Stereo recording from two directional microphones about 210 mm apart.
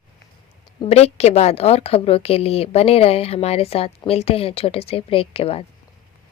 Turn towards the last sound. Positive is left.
turn(degrees=25)  # may be behind; listen again after turning